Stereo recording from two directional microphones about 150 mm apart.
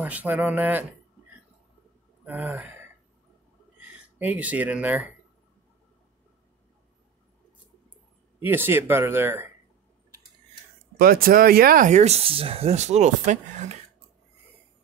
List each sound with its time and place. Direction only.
0.0 s speech: 10° right (ahead or behind)
2.2 s speech: 10° right (ahead or behind)
3.9 s speech: 10° right (ahead or behind)
8.4 s speech: 15° right (ahead or behind)
11.0 s speech: 80° right; by 13.7 s 55° right (ahead or behind)